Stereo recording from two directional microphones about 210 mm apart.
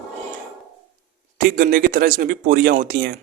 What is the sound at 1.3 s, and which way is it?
Speech, 40° right (ahead or behind).